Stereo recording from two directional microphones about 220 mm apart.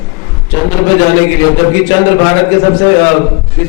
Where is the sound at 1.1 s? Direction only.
15° left (ahead or behind).